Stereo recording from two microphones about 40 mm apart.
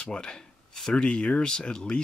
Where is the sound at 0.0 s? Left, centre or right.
Left.